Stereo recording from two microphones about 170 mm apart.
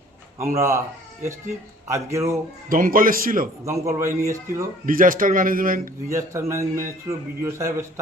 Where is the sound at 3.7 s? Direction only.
15° right (ahead or behind).